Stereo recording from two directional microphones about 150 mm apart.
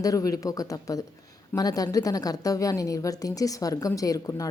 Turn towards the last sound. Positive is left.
turn(degrees=25)  # may be behind; listen again after turning